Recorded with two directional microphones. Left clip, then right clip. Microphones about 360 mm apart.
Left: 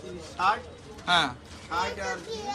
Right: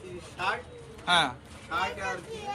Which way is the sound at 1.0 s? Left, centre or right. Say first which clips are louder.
Even; centre.